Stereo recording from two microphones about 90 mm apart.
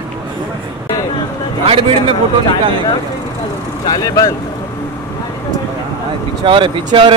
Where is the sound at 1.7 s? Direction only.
90° right.